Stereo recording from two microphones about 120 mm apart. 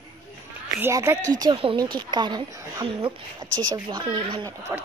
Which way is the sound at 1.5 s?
50° right (ahead or behind).